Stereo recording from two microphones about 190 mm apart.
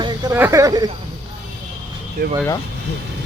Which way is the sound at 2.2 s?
55° right (ahead or behind).